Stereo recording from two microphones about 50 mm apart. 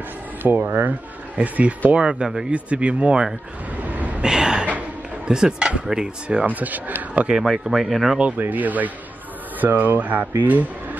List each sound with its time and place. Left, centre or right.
0.4 s speech: right
3.9 s vehicle: right
4.2 s a sound: centre
5.3 s speech: centre
6.4 s a man's voice: right
7.4 s speech: centre
8.4 s a man's voice: right